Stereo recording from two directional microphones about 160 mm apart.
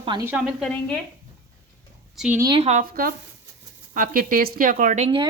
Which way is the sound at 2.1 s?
10° right (ahead or behind).